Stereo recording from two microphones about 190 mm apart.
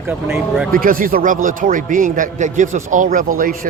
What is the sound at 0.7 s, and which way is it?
A man's voice, 50° right (ahead or behind).